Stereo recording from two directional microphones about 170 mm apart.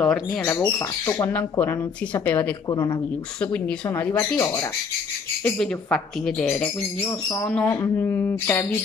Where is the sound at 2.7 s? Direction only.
25° left (ahead or behind).